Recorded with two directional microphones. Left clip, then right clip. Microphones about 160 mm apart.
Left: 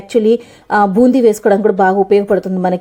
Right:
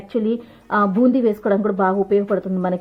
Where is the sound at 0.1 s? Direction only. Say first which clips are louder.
Left 11 dB; 25° left (ahead or behind).